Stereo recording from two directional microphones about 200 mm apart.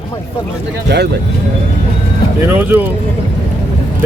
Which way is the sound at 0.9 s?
55° right (ahead or behind).